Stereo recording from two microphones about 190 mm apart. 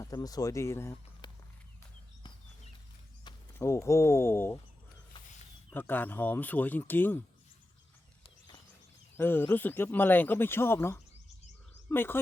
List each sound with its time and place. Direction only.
0.0 s speech: 20° left (ahead or behind)
3.2 s speech: 15° left (ahead or behind)
5.7 s speech: 10° left (ahead or behind)
8.2 s a sound: 20° left (ahead or behind)
9.1 s speech: 10° left (ahead or behind)